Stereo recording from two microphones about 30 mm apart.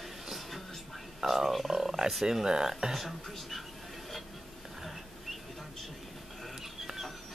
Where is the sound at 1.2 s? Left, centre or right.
Centre.